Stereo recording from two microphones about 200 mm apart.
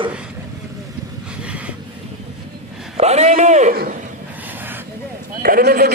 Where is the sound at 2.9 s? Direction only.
30° right (ahead or behind).